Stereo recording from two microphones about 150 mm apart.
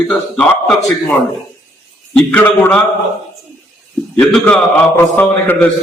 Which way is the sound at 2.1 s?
10° left (ahead or behind).